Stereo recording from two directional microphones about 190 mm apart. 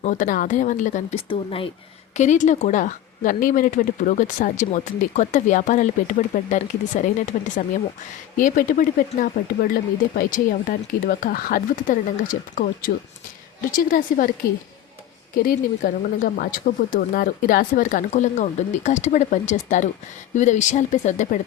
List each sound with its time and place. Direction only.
0.0 s speech: 45° left (ahead or behind)
1.3 s speech: 30° left (ahead or behind)
2.1 s speech: 40° left (ahead or behind)
15.4 s speech: 50° left (ahead or behind)